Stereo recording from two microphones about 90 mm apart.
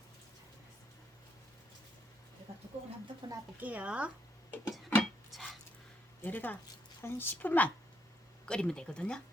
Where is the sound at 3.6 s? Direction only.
15° right (ahead or behind).